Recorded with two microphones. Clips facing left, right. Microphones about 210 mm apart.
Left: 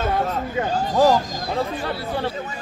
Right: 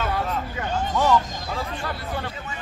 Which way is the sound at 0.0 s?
40° left (ahead or behind).